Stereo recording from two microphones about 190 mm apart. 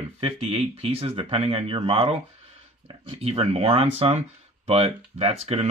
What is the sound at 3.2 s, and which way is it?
Speech, 30° right (ahead or behind).